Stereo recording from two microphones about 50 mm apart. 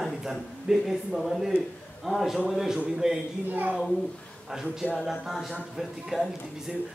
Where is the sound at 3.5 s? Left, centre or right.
Right.